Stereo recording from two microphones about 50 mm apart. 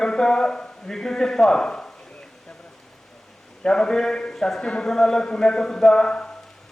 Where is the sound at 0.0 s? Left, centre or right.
Centre.